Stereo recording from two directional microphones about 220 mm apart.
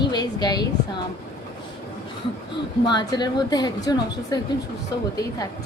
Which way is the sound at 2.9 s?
20° left (ahead or behind).